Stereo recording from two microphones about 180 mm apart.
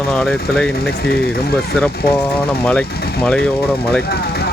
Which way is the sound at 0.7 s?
60° left (ahead or behind).